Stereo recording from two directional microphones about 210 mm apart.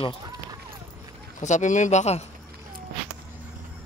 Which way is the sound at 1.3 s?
35° left (ahead or behind).